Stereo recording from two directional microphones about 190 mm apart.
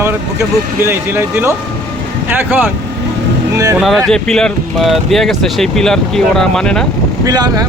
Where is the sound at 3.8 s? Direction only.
Centre (ahead or behind).